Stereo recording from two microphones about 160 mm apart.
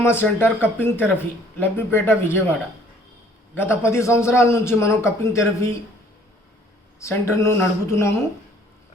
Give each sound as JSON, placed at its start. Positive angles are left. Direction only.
{"t": 0.0, "sound": "a man's voice", "side_deg": 15}
{"t": 3.5, "sound": "a man's voice", "side_deg": 15}
{"t": 7.0, "sound": "a man's voice", "side_deg": 15}